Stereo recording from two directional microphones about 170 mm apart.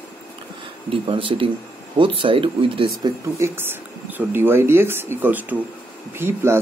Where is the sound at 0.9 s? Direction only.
30° right (ahead or behind).